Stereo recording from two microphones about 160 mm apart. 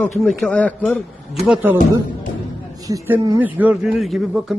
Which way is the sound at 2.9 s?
15° right (ahead or behind).